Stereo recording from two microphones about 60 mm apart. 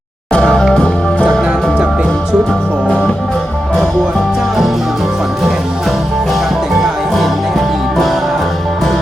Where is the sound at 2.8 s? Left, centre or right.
Centre.